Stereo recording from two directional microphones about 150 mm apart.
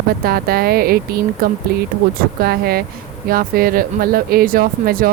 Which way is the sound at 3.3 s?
75° right (ahead or behind).